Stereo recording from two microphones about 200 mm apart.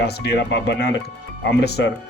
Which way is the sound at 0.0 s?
55° left (ahead or behind).